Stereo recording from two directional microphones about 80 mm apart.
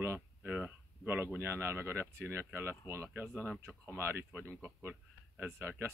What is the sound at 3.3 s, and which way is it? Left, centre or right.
Speech, centre.